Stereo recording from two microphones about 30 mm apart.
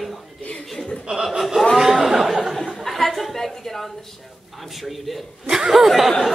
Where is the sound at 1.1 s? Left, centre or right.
Right.